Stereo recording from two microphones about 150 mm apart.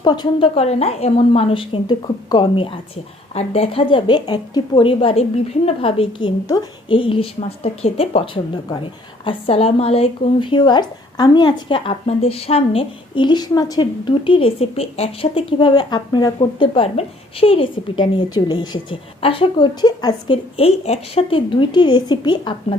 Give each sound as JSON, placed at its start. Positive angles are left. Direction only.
{"t": 0.0, "sound": "a woman's voice", "side_deg": 30}